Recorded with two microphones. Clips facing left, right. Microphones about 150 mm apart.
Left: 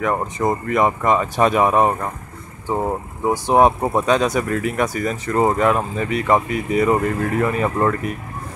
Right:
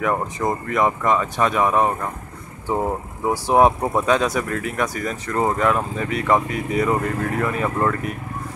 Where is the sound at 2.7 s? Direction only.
5° left (ahead or behind).